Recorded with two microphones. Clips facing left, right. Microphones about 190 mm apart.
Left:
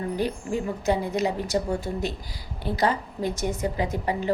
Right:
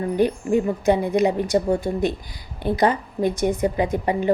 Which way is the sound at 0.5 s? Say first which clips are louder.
Right 5 dB; 15° right (ahead or behind).